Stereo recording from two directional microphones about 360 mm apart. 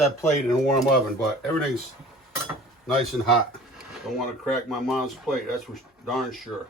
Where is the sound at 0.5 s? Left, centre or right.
Centre.